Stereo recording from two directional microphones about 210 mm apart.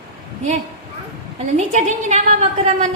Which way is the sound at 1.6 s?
35° right (ahead or behind).